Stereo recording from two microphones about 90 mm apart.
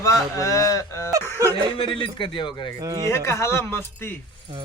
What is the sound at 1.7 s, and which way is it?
Speech, 70° left (ahead or behind).